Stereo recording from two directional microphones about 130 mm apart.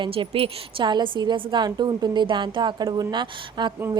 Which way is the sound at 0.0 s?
45° right (ahead or behind).